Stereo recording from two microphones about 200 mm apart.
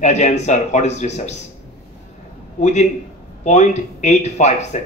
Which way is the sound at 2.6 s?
35° left (ahead or behind).